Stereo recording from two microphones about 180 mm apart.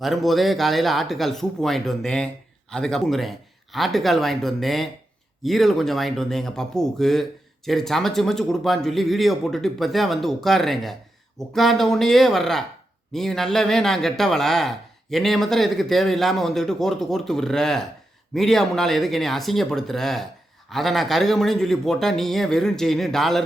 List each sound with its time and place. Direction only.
0.0 s speech: centre (ahead or behind)